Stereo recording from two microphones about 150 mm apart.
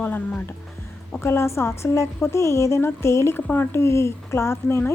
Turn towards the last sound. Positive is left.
turn(degrees=15)  # may be behind; listen again after turning